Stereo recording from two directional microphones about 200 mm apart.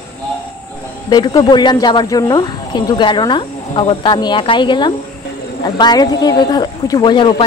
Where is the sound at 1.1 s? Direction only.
20° left (ahead or behind).